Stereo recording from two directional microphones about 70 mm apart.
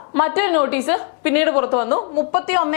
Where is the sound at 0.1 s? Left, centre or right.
Centre.